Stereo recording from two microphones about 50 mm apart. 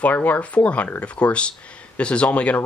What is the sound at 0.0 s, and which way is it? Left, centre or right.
Speech, left.